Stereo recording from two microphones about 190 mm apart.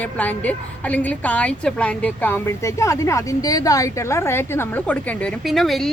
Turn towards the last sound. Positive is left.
turn(degrees=0)  # may be behind; listen again after turning